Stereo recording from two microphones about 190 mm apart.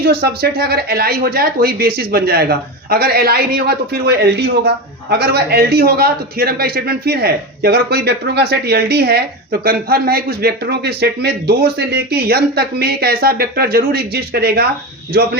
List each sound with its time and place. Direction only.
0.0 s speech: 55° right (ahead or behind)